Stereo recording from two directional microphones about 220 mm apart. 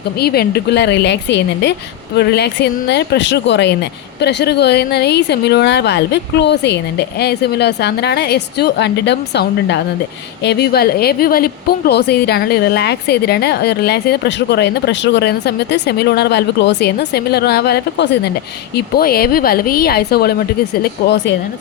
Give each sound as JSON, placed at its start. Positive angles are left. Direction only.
{"t": 0.2, "sound": "a woman's voice", "side_deg": 45}